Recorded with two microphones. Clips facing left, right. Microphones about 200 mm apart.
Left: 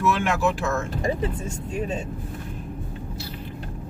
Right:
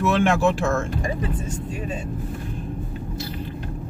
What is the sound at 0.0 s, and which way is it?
Speech, 25° right (ahead or behind).